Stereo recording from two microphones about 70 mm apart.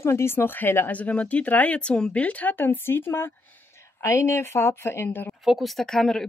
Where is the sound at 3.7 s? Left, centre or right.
Left.